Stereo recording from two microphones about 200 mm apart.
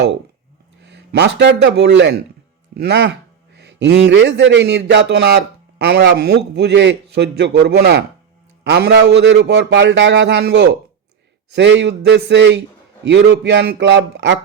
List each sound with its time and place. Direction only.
0.8 s a man's voice: 60° right (ahead or behind)